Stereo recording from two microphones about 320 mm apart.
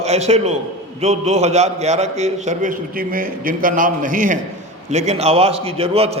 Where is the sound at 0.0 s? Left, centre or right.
Centre.